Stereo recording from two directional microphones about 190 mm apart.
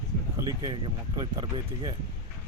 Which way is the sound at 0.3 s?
20° right (ahead or behind).